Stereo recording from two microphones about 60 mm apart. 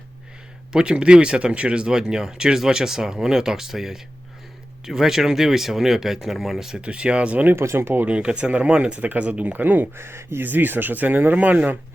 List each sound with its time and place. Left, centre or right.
0.7 s speech: centre
6.8 s speech: centre
7.5 s speech: right
8.0 s speech: centre
10.0 s speech: right
10.4 s speech: right